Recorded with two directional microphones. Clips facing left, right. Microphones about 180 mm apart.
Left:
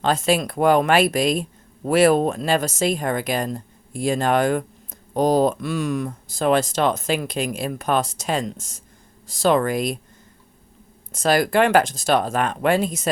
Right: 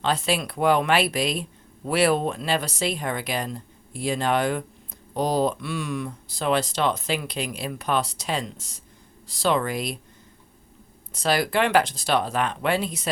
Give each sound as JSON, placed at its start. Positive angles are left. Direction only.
{"t": 0.0, "sound": "speech", "side_deg": 45}
{"t": 11.1, "sound": "speech", "side_deg": 45}